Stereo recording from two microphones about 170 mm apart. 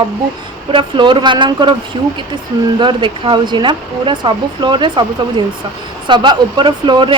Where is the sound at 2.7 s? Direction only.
30° right (ahead or behind).